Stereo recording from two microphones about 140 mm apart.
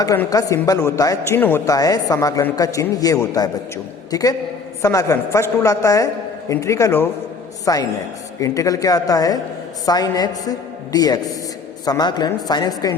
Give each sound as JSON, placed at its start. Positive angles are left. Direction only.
{"t": 0.3, "sound": "a man's voice", "side_deg": 25}